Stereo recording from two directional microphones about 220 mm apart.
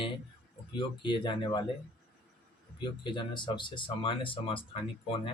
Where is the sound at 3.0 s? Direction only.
20° left (ahead or behind).